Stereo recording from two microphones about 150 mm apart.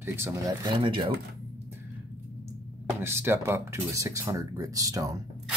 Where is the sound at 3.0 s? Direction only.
15° right (ahead or behind).